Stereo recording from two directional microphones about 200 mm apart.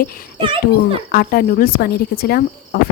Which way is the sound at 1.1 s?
50° left (ahead or behind).